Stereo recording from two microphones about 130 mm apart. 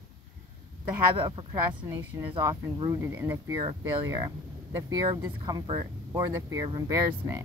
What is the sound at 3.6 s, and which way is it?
Speech, 30° right (ahead or behind).